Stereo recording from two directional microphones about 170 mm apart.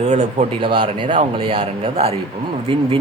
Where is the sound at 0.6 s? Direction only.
30° right (ahead or behind).